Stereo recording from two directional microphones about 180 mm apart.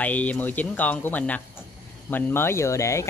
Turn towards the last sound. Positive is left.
turn(degrees=15)  # may be behind; listen again after turning